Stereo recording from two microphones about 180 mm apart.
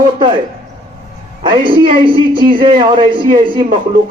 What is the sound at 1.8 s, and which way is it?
A man's voice, 30° right (ahead or behind).